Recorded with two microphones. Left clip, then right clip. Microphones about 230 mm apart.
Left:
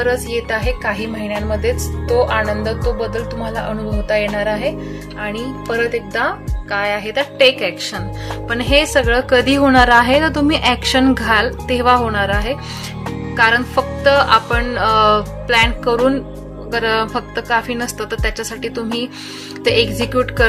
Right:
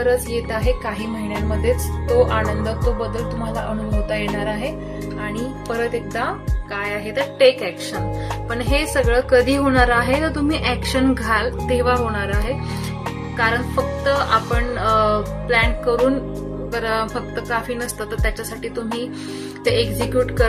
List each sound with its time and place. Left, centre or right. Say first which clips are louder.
0.4 s speech: left 3 dB; left
3.2 s music: left 3 dB; centre
4.1 s speech: left 7 dB; left
5.7 s a woman's voice: left 5 dB; left
13.3 s music: left 7 dB; left
14.0 s a woman's voice: left 7 dB; left